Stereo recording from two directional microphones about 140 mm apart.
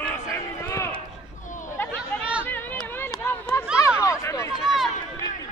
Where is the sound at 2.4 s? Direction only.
15° left (ahead or behind).